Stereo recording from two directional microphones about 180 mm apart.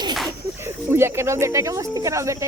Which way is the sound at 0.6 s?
15° right (ahead or behind).